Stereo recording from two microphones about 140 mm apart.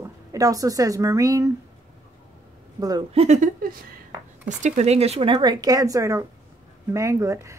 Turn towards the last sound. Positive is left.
turn(degrees=-20)  # may be behind; listen again after turning